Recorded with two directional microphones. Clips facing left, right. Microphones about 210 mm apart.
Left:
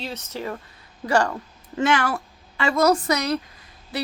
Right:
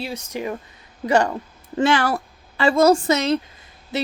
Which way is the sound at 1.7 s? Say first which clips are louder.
Right 3 dB; 30° right (ahead or behind).